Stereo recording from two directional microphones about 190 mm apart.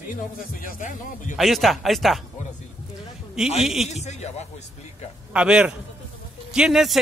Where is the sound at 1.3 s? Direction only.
Centre (ahead or behind).